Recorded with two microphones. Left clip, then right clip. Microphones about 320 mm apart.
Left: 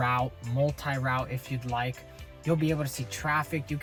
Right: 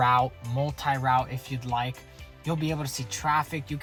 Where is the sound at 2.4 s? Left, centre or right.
Centre.